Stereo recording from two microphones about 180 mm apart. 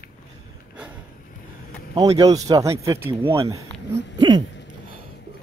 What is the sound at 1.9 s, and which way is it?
Speech, 20° right (ahead or behind).